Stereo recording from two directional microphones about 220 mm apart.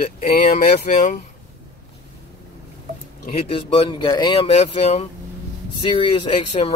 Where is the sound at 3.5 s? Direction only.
25° left (ahead or behind).